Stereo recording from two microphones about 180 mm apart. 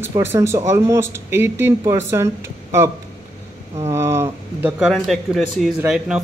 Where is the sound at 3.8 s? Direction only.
15° right (ahead or behind).